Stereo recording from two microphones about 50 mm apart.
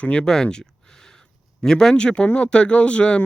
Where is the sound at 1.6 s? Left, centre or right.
Centre.